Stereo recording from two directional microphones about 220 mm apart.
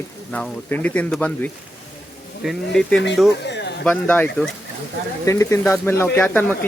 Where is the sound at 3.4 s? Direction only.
50° left (ahead or behind).